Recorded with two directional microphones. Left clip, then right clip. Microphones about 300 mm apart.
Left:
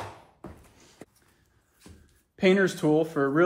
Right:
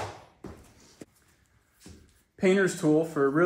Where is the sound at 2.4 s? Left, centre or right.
Left.